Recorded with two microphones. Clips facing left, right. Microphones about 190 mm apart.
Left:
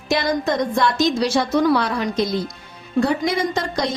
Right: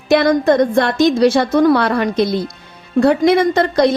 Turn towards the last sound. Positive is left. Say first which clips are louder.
# right 9 dB
turn(degrees=-60)  # may be behind; listen again after turning